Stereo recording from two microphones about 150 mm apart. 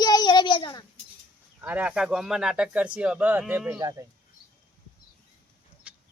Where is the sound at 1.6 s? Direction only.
10° right (ahead or behind).